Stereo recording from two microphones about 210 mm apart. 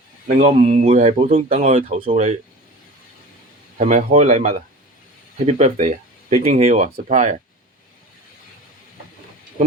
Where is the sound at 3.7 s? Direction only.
35° right (ahead or behind).